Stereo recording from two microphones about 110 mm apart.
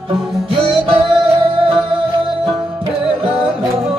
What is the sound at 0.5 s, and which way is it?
Music, 55° right (ahead or behind).